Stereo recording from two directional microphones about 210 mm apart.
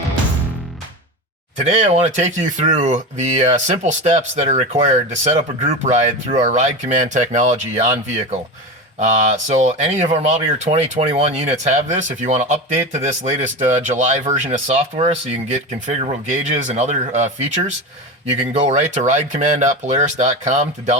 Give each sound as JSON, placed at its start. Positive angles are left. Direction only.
{"t": 1.5, "sound": "speech", "side_deg": -35}
{"t": 9.0, "sound": "speech", "side_deg": -35}
{"t": 18.6, "sound": "speech", "side_deg": -30}